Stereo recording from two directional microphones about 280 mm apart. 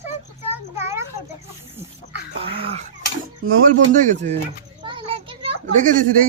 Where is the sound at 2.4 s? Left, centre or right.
Centre.